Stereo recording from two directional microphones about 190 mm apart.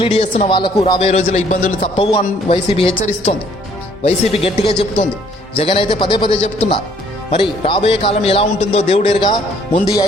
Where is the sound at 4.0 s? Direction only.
30° left (ahead or behind).